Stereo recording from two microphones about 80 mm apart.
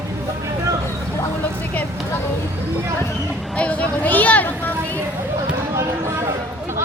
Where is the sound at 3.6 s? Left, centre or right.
Centre.